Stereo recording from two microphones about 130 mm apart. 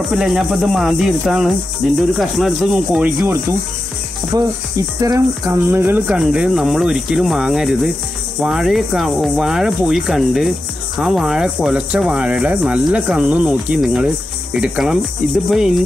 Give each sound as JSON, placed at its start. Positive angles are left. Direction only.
{"t": 0.1, "sound": "speech", "side_deg": -5}
{"t": 4.3, "sound": "music", "side_deg": -30}
{"t": 4.7, "sound": "speech", "side_deg": -25}